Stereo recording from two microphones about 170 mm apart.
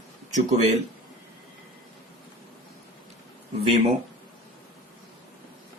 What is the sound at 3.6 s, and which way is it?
Speech, 40° right (ahead or behind).